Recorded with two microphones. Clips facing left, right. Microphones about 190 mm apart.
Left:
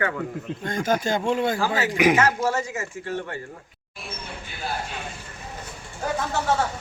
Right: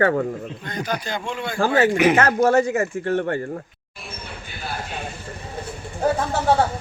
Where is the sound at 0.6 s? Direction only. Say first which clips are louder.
Left 5 dB; 45° left (ahead or behind).